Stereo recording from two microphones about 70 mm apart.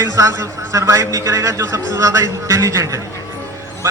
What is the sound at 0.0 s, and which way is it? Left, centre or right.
A man's voice, right.